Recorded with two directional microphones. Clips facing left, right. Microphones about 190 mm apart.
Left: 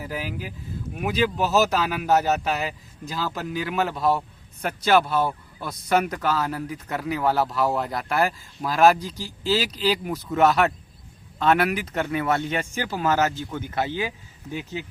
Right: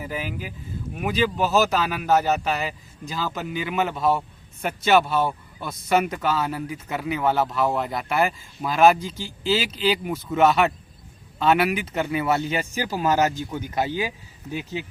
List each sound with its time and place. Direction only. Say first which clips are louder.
0.0 s speech: right 1 dB; centre (ahead or behind)